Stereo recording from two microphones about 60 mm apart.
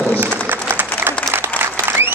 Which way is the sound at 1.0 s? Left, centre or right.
Right.